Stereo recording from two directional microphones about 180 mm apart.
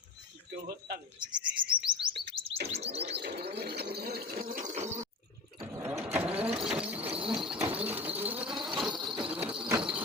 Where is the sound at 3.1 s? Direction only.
65° right (ahead or behind); by 5.0 s 40° right (ahead or behind).